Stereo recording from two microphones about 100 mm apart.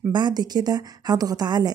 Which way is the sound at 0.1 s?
45° right (ahead or behind).